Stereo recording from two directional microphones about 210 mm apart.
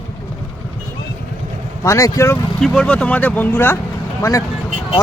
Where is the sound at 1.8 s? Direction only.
15° left (ahead or behind).